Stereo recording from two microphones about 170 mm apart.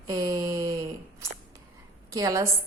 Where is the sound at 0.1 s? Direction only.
20° right (ahead or behind).